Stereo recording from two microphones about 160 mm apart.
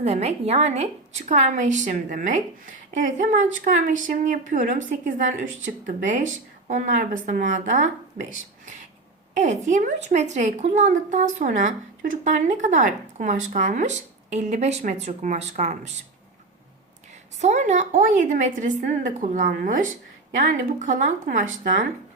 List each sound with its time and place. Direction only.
0.0 s speech: 40° right (ahead or behind)
9.3 s speech: 50° right (ahead or behind)
17.4 s speech: 45° right (ahead or behind)